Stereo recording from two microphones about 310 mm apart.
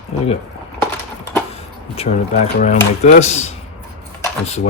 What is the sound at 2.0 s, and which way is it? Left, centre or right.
Speech, left.